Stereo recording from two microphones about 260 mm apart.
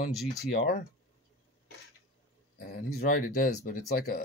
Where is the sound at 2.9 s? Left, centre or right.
Left.